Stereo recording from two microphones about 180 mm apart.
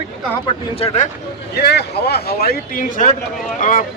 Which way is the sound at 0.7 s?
35° left (ahead or behind).